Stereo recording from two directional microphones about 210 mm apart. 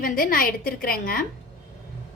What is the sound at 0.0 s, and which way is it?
A woman's voice, 40° left (ahead or behind).